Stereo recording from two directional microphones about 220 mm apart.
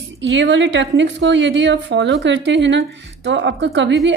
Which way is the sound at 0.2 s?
55° right (ahead or behind).